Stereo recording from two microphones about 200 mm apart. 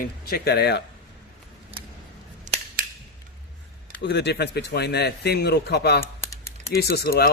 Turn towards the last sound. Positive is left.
turn(degrees=50)  # may be behind; listen again after turning